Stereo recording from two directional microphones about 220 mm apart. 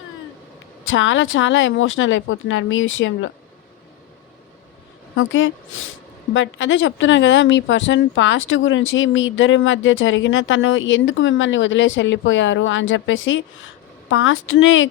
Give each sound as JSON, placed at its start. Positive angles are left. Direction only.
{"t": 0.9, "sound": "speech", "side_deg": 60}
{"t": 5.1, "sound": "speech", "side_deg": 65}